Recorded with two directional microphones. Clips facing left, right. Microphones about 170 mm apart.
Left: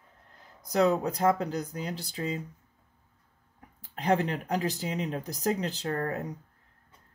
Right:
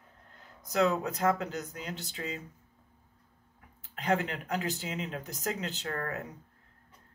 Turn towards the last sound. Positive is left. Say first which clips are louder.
# left 5 dB
turn(degrees=30)  # may be behind; listen again after turning